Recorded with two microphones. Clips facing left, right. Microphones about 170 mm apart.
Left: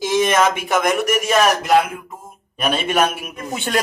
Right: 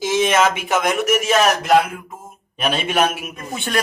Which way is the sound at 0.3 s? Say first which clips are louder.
Even; 5° right (ahead or behind).